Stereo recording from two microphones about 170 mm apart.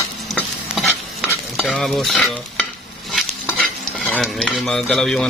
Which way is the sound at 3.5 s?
10° left (ahead or behind).